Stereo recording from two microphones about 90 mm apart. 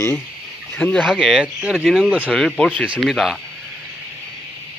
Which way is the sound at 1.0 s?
5° right (ahead or behind).